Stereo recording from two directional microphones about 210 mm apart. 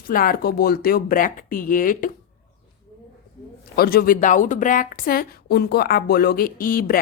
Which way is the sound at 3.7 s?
45° left (ahead or behind).